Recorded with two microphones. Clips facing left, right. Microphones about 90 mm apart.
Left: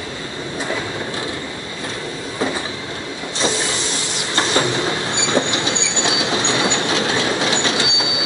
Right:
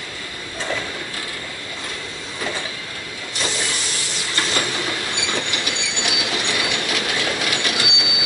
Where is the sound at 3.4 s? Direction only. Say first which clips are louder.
Left 5 dB; 25° left (ahead or behind).